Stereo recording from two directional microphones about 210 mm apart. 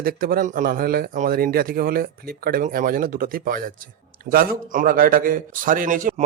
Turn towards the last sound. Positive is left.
turn(degrees=-40)  # may be behind; listen again after turning